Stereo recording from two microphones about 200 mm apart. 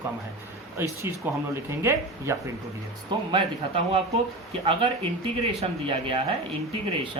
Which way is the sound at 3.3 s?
25° right (ahead or behind).